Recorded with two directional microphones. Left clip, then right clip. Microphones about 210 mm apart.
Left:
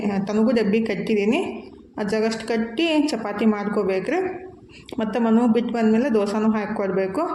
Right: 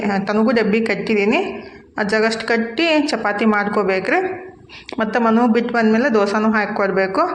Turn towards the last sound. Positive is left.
turn(degrees=0)  # may be behind; listen again after turning